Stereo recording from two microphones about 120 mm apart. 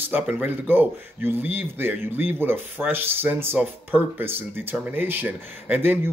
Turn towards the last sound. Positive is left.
turn(degrees=-20)  # may be behind; listen again after turning